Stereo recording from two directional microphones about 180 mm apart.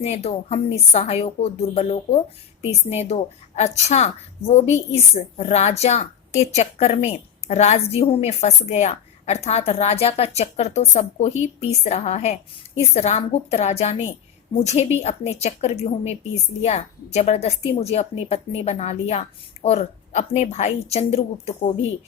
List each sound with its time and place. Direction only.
0.0 s a woman's voice: 35° left (ahead or behind)